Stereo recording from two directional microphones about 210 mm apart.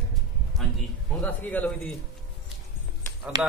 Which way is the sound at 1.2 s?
5° left (ahead or behind).